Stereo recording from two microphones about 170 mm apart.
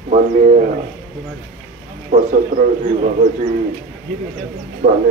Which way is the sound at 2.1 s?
40° right (ahead or behind).